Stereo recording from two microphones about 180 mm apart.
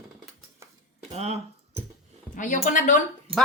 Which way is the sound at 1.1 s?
35° right (ahead or behind).